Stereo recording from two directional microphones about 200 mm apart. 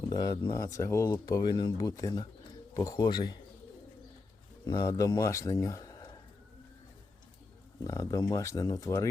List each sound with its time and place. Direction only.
0.1 s speech: 20° left (ahead or behind)
4.6 s speech: 20° left (ahead or behind)
7.9 s speech: 20° left (ahead or behind)